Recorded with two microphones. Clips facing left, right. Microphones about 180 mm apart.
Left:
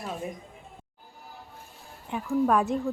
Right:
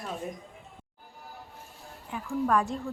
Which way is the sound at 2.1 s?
20° left (ahead or behind).